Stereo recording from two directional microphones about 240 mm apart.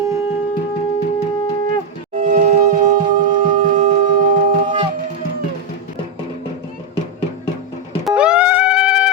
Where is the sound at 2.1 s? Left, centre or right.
Right.